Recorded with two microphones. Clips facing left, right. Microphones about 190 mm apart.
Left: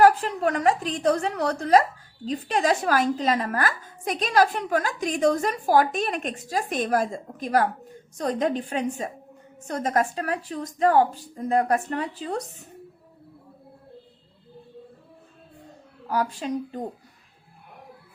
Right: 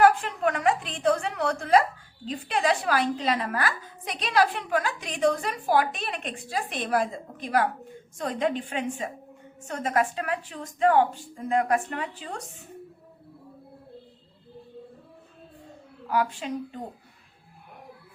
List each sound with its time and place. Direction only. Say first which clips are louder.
0.0 s a woman's voice: left 2 dB; 35° left (ahead or behind)
16.0 s speech: left 1 dB; 40° left (ahead or behind)